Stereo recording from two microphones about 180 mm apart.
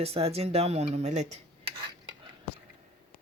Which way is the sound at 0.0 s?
35° right (ahead or behind).